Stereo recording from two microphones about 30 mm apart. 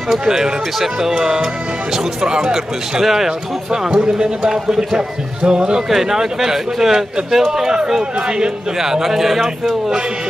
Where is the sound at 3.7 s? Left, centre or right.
Right.